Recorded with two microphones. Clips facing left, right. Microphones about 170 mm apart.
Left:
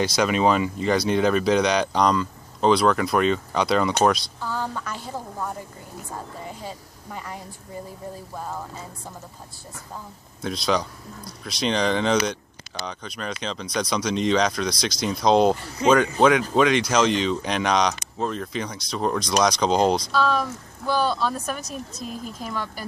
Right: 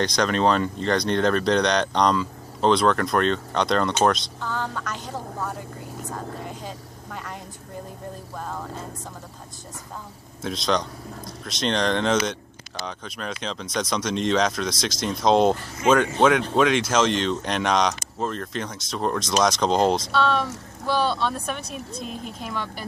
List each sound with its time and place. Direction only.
0.0 s speech: 5° left (ahead or behind)
6.6 s speech: 5° left (ahead or behind)
8.4 s speech: 5° left (ahead or behind)
10.4 s speech: centre (ahead or behind)
15.8 s speech: 30° left (ahead or behind)
16.2 s speech: centre (ahead or behind)
22.4 s speech: centre (ahead or behind)